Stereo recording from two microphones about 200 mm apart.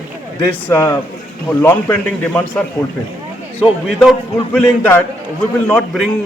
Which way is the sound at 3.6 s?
Centre (ahead or behind).